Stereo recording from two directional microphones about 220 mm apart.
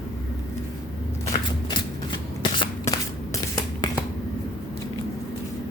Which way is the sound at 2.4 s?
20° left (ahead or behind).